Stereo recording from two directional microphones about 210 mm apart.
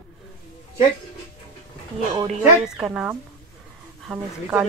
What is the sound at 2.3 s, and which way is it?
A woman's voice, centre (ahead or behind).